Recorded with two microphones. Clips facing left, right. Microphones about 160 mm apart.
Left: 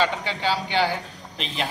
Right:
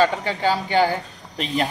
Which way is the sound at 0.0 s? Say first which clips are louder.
Right 5 dB; 45° right (ahead or behind).